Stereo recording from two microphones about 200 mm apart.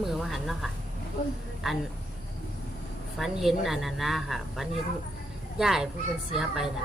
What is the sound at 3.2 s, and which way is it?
Speech, centre (ahead or behind).